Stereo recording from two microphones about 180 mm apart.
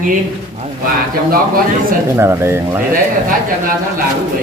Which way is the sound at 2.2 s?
15° right (ahead or behind).